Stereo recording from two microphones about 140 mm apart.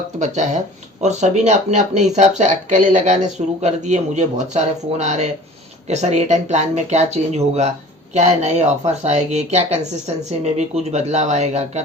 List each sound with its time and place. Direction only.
0.2 s speech: 55° right (ahead or behind)
10.9 s speech: 55° right (ahead or behind)